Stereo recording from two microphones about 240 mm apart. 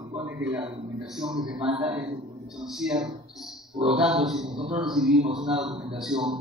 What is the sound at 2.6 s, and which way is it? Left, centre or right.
A man's voice, centre.